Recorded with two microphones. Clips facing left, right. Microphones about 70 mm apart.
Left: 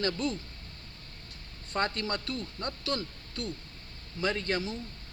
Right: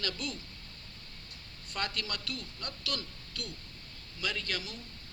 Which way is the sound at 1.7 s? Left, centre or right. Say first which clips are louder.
Left 6 dB; left.